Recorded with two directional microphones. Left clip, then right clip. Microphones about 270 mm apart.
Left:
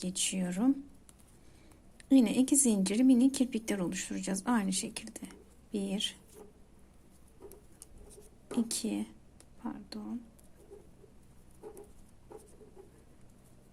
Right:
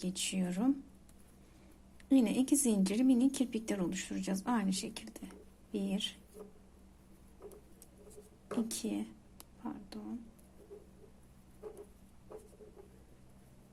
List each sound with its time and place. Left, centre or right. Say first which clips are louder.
0.0 s a woman's voice: left 3 dB; centre
2.0 s a woman's voice: left 4 dB; centre
8.5 s a woman's voice: left 3 dB; centre